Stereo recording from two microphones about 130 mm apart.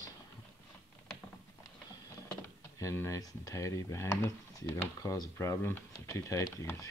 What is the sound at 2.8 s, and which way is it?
Speech, 25° left (ahead or behind).